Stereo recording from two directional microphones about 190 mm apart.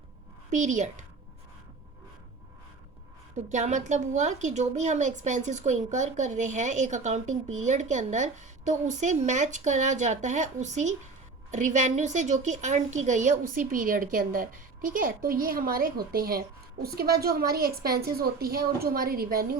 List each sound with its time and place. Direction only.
0.5 s a woman's voice: 40° right (ahead or behind)
3.5 s a woman's voice: 40° right (ahead or behind)